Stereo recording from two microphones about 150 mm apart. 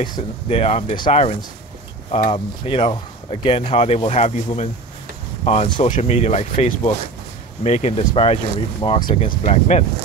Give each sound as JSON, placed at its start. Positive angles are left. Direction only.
{"t": 0.5, "sound": "speech", "side_deg": 40}